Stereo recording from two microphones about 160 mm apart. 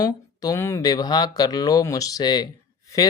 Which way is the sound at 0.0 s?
20° left (ahead or behind).